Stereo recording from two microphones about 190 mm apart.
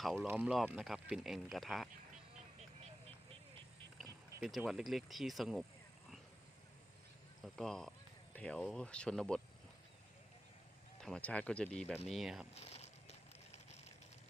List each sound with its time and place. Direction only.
0.0 s speech: centre (ahead or behind)
4.4 s speech: 5° right (ahead or behind)
7.4 s speech: centre (ahead or behind)
11.0 s speech: 5° left (ahead or behind)
12.5 s a sound: 35° left (ahead or behind)